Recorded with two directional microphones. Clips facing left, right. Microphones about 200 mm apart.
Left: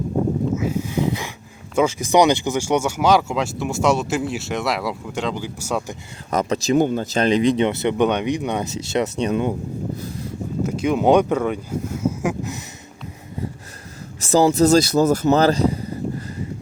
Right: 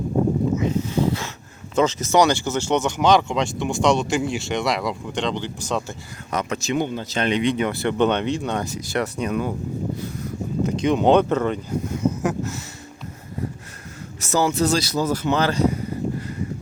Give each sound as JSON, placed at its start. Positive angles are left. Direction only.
{"t": 0.5, "sound": "a sound", "side_deg": 5}
{"t": 1.7, "sound": "speech", "side_deg": 10}
{"t": 6.3, "sound": "speech", "side_deg": 35}
{"t": 7.6, "sound": "speech", "side_deg": 20}
{"t": 10.6, "sound": "speech", "side_deg": 5}
{"t": 14.2, "sound": "speech", "side_deg": 30}